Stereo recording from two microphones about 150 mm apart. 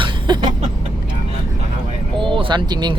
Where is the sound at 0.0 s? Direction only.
30° right (ahead or behind).